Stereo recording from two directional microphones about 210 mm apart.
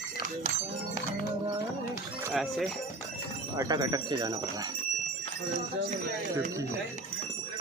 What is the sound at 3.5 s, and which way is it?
Speech, 20° right (ahead or behind).